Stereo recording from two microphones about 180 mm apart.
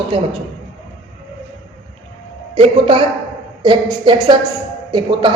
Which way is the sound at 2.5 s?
30° right (ahead or behind).